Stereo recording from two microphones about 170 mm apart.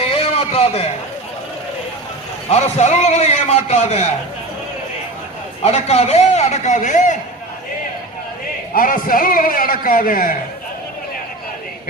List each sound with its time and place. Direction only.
0.1 s a sound: 35° left (ahead or behind)
2.5 s a man's voice: 40° left (ahead or behind)
5.6 s a man's voice: 40° left (ahead or behind)
8.7 s a man's voice: 55° left (ahead or behind)